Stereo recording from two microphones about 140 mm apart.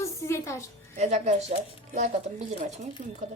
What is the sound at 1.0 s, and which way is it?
Speech, 55° right (ahead or behind).